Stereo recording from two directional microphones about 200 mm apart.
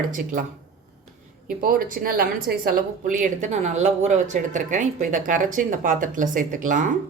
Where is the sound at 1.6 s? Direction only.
45° right (ahead or behind).